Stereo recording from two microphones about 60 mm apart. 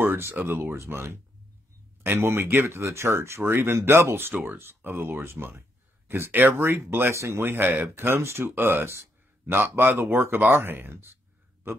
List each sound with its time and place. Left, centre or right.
0.0 s speech: right
4.3 s speech: right